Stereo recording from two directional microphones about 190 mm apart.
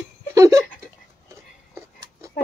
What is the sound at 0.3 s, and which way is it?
Laughter, 15° right (ahead or behind).